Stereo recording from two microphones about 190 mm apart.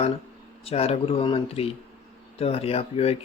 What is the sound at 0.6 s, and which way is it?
Speech, 30° left (ahead or behind).